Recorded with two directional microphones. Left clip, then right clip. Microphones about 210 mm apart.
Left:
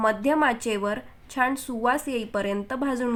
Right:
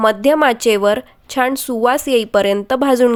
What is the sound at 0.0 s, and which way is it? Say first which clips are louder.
A woman's voice: right 9 dB; 40° right (ahead or behind).